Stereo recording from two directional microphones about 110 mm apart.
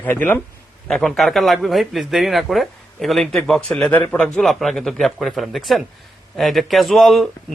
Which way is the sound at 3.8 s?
15° left (ahead or behind).